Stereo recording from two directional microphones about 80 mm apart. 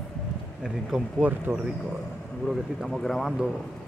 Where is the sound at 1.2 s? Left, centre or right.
Right.